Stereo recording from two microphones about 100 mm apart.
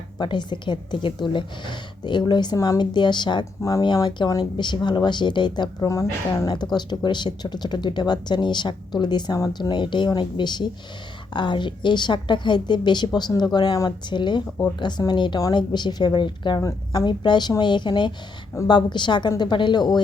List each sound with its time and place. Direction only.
0.2 s speech: 50° left (ahead or behind)
3.6 s speech: 35° left (ahead or behind)
4.0 s speech: 45° left (ahead or behind)
5.9 s speech: 35° left (ahead or behind)
6.7 s speech: 50° left (ahead or behind)